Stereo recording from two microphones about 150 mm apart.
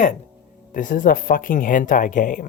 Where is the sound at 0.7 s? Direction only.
65° left (ahead or behind).